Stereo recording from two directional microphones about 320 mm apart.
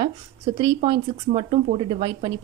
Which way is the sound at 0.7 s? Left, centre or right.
Centre.